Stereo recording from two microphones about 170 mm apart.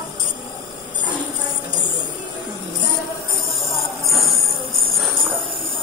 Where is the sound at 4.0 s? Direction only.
Centre (ahead or behind).